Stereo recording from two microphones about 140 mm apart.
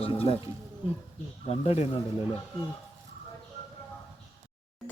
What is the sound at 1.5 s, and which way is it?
Speech, 50° left (ahead or behind).